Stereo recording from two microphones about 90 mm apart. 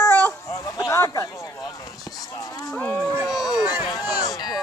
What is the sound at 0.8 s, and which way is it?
Speech, 30° left (ahead or behind).